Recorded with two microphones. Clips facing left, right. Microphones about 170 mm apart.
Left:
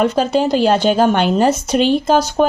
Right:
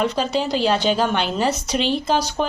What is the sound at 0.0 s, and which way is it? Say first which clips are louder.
Speech: left 6 dB; 50° left (ahead or behind).